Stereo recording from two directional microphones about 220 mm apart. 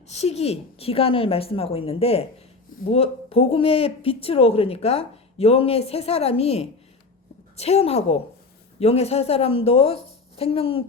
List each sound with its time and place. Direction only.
0.1 s speech: 30° left (ahead or behind)